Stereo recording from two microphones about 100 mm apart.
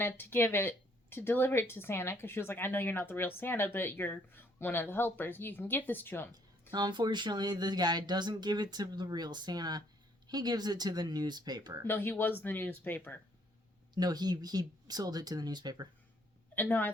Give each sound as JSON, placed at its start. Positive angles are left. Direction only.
{"t": 0.0, "sound": "a woman's voice", "side_deg": 20}
{"t": 6.3, "sound": "speech", "side_deg": -45}
{"t": 11.9, "sound": "a woman's voice", "side_deg": 20}
{"t": 13.9, "sound": "speech", "side_deg": -45}
{"t": 16.6, "sound": "a woman's voice", "side_deg": 20}